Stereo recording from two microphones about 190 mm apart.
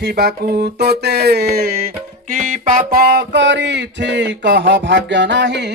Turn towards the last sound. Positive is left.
turn(degrees=-65)  # may be behind; listen again after turning